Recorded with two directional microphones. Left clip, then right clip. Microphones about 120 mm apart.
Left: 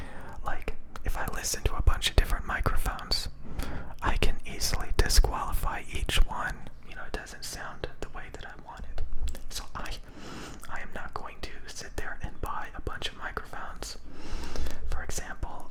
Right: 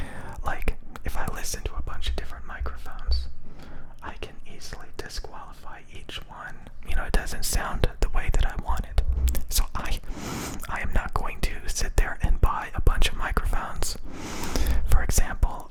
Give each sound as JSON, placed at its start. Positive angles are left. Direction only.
{"t": 0.0, "sound": "whispering", "side_deg": -15}
{"t": 1.1, "sound": "whispering", "side_deg": -5}
{"t": 1.6, "sound": "whispering", "side_deg": 20}
{"t": 6.9, "sound": "whispering", "side_deg": -35}
{"t": 8.5, "sound": "whispering", "side_deg": -55}
{"t": 9.7, "sound": "whispering", "side_deg": -30}
{"t": 10.2, "sound": "whispering", "side_deg": -50}
{"t": 10.7, "sound": "whispering", "side_deg": -35}
{"t": 14.1, "sound": "a sound", "side_deg": -65}
{"t": 15.0, "sound": "whispering", "side_deg": -35}